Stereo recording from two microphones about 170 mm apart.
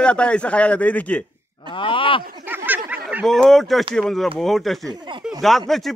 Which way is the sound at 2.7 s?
10° right (ahead or behind).